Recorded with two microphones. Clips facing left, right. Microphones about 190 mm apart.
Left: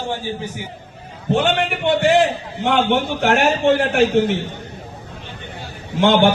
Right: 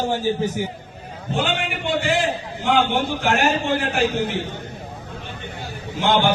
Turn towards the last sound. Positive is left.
turn(degrees=65)  # may be behind; listen again after turning